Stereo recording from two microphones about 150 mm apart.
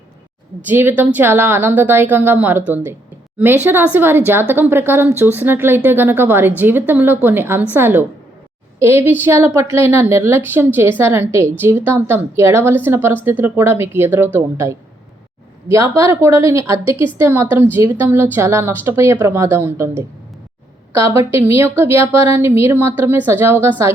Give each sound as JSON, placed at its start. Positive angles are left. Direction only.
{"t": 0.7, "sound": "a woman's voice", "side_deg": -10}
{"t": 20.9, "sound": "a woman's voice", "side_deg": -15}